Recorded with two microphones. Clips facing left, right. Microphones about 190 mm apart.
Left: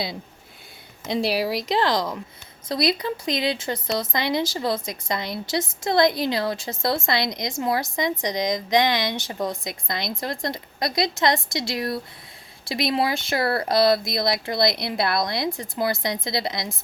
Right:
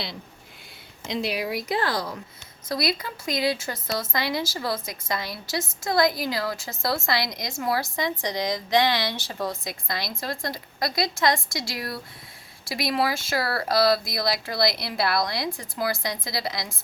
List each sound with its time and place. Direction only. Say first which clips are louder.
1.3 s speech: left 3 dB; 90° left
2.6 s a woman's voice: left 4 dB; 25° left (ahead or behind)